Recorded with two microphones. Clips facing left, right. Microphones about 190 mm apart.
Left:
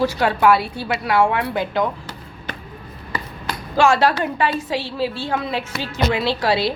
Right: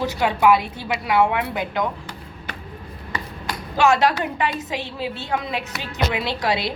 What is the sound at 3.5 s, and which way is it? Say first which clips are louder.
A woman's voice: left 2 dB; 20° right (ahead or behind).